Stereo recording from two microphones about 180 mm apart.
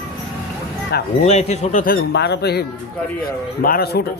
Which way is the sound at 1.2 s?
40° left (ahead or behind).